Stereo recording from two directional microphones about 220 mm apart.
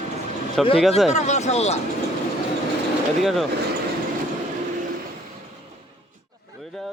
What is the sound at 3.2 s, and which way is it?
Speech, centre (ahead or behind).